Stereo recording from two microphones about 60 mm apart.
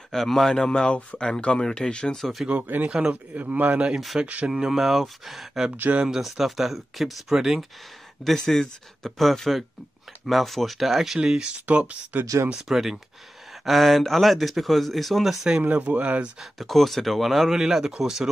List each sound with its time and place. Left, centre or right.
0.1 s speech: centre
2.1 s speech: centre
2.4 s speech: right
2.9 s speech: centre
3.3 s speech: right
4.5 s speech: centre
5.7 s speech: right
5.9 s speech: centre
8.2 s speech: centre; by 12.2 s right
12.5 s speech: centre
15.6 s speech: right
16.3 s speech: centre